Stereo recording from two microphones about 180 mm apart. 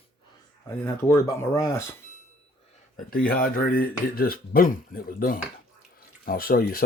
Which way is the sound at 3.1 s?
55° left (ahead or behind).